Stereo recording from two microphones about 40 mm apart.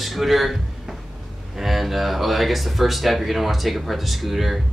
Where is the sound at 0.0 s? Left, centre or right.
Centre.